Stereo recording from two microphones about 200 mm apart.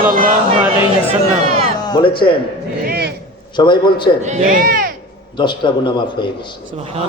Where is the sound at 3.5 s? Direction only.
20° left (ahead or behind).